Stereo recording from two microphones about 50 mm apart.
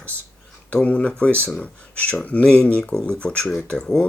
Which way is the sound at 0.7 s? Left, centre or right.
Left.